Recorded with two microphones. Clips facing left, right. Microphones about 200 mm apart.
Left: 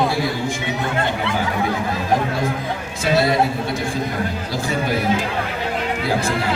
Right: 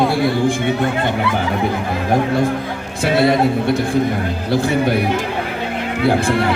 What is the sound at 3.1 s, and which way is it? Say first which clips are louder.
Speech: right 3 dB; 60° right (ahead or behind).